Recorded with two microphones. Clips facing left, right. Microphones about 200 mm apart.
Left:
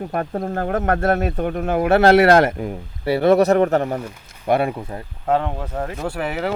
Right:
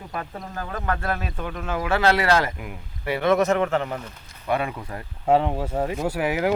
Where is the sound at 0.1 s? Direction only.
55° left (ahead or behind).